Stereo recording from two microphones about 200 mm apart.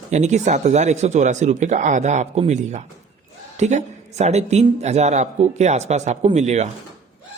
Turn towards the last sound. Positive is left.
turn(degrees=-35)  # may be behind; listen again after turning